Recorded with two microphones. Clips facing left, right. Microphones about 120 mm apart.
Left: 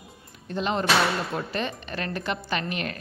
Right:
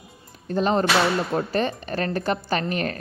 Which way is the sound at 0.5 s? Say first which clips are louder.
Right 4 dB; 40° right (ahead or behind).